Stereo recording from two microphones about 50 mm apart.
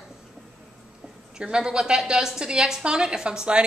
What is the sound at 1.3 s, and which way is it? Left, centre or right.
A woman's voice, centre.